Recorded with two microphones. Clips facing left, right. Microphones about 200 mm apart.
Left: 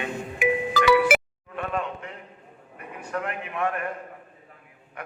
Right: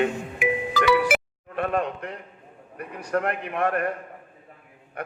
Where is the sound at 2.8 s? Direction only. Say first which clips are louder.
Right 5 dB; 55° right (ahead or behind).